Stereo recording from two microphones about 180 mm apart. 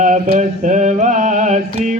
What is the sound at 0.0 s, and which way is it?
Mantra, 45° right (ahead or behind).